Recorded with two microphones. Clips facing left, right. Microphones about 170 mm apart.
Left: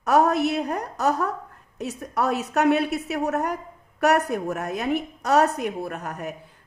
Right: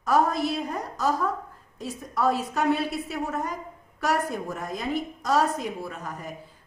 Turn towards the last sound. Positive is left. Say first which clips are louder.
# left 4 dB
turn(degrees=65)  # may be behind; listen again after turning